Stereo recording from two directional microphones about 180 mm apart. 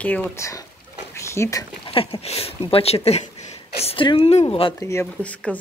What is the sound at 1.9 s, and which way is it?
Speech, 30° left (ahead or behind).